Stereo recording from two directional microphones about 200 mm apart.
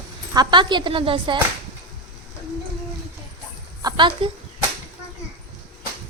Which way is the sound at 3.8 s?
25° right (ahead or behind).